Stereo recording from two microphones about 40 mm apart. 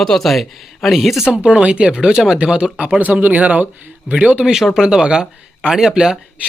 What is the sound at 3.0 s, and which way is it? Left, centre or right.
Speech, right.